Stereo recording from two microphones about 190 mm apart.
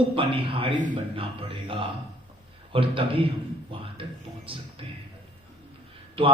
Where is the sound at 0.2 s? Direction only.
30° right (ahead or behind).